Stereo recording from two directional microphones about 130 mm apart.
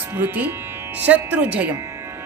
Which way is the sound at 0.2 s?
15° right (ahead or behind).